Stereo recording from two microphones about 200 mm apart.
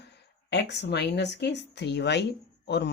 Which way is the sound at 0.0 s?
60° left (ahead or behind).